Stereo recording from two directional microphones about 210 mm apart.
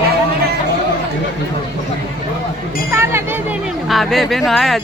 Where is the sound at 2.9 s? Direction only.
10° right (ahead or behind).